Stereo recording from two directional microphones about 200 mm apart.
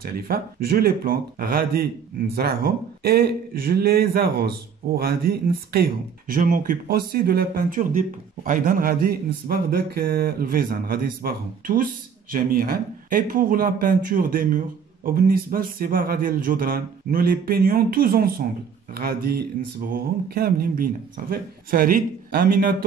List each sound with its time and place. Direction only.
0.0 s speech: 50° right (ahead or behind)